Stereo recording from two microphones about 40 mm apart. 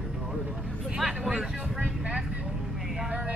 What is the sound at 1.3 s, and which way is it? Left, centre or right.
Vehicle, right.